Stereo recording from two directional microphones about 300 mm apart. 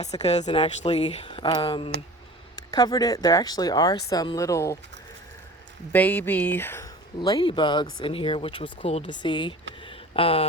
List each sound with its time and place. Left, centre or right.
0.0 s speech: left
5.9 s speech: centre